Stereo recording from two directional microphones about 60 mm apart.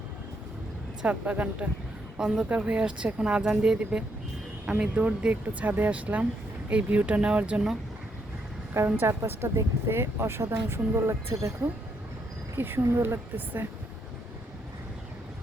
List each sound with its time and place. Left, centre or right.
1.0 s speech: right
2.1 s a woman's voice: centre
2.5 s speech: right
9.0 s speech: right
12.5 s speech: right